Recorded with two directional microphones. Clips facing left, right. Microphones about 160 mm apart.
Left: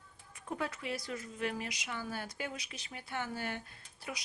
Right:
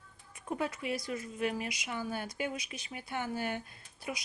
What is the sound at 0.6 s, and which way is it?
Speech, 15° right (ahead or behind).